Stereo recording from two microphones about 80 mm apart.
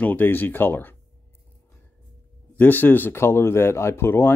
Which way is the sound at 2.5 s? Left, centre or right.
Left.